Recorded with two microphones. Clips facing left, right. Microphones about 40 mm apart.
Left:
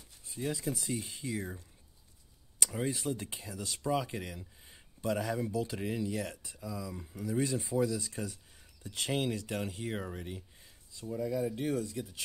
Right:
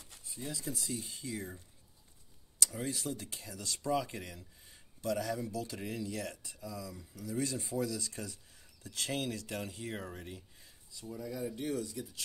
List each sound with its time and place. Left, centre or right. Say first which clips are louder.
0.3 s speech: left 6 dB; left
2.6 s speech: left 3 dB; left
11.0 s speech: left 7 dB; left
11.5 s speech: left 3 dB; left